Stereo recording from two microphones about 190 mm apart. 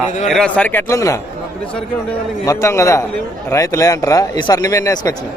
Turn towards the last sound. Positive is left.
turn(degrees=15)  # may be behind; listen again after turning